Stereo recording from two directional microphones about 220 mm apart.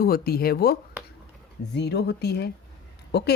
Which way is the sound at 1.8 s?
50° left (ahead or behind).